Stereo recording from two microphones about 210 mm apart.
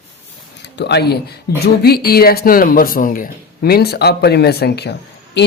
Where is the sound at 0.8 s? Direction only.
55° left (ahead or behind).